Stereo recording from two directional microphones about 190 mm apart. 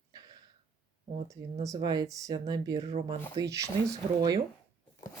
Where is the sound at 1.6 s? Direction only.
20° right (ahead or behind).